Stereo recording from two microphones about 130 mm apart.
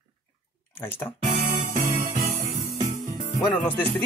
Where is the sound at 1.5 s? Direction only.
90° right.